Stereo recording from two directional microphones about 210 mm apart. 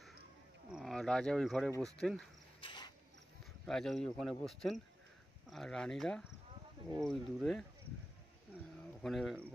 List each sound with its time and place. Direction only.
0.7 s speech: centre (ahead or behind)
2.6 s cricket: 20° left (ahead or behind)
3.6 s speech: centre (ahead or behind)
9.0 s speech: centre (ahead or behind)